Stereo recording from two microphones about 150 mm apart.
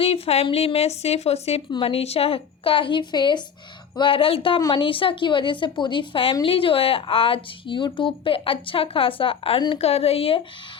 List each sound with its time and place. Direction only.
0.0 s a woman's voice: 40° left (ahead or behind)